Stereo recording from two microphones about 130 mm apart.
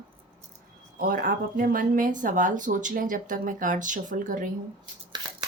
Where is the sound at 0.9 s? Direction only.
90° right.